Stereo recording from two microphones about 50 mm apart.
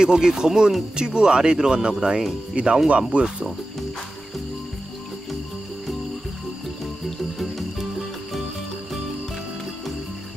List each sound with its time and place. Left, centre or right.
0.0 s speech: centre
7.3 s music: centre